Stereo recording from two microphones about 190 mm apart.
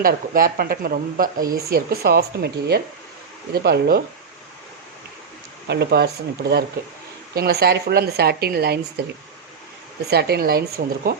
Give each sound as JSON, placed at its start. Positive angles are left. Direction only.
{"t": 0.0, "sound": "speech", "side_deg": -50}
{"t": 5.6, "sound": "speech", "side_deg": -60}
{"t": 7.3, "sound": "speech", "side_deg": -55}
{"t": 10.1, "sound": "speech", "side_deg": -55}